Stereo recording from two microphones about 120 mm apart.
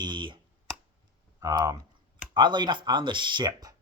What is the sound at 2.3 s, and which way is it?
Speech, 40° right (ahead or behind).